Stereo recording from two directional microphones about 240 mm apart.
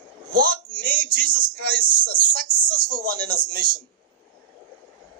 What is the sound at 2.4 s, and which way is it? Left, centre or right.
A woman's voice, centre.